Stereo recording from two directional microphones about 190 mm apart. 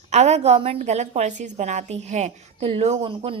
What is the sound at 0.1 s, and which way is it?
A woman's voice, 35° right (ahead or behind).